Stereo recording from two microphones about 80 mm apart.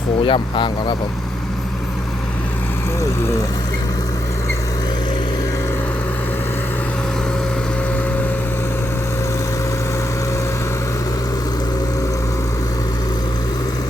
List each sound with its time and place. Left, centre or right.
0.3 s speech: left
3.0 s speech: left